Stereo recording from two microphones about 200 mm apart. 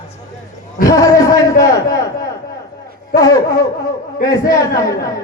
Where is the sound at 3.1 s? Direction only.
15° left (ahead or behind).